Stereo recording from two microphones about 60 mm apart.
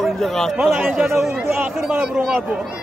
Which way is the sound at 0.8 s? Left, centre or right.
Centre.